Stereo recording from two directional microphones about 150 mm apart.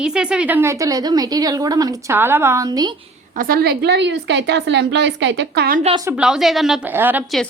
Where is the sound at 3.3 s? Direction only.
75° right (ahead or behind); by 3.9 s 90° right.